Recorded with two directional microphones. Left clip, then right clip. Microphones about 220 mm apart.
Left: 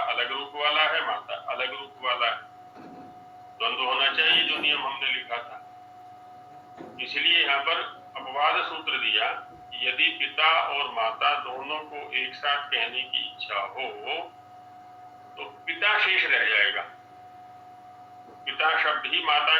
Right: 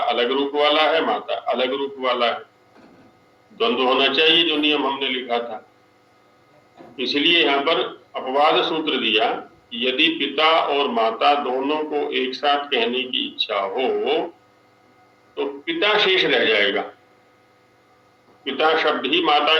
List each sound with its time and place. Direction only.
0.0 s a man's voice: 60° right (ahead or behind)
3.7 s a man's voice: 60° right (ahead or behind)
7.2 s a man's voice: 60° right (ahead or behind)
15.4 s a man's voice: 65° right (ahead or behind)
18.4 s a man's voice: 60° right (ahead or behind)